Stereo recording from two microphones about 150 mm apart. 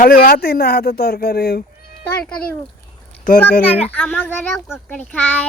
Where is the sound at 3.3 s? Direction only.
65° left (ahead or behind).